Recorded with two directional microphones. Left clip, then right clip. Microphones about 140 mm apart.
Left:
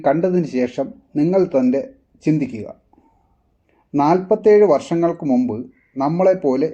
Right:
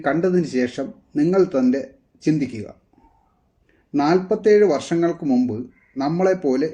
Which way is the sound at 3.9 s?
25° left (ahead or behind).